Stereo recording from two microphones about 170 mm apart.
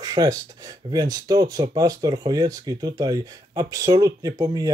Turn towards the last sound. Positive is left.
turn(degrees=-20)  # may be behind; listen again after turning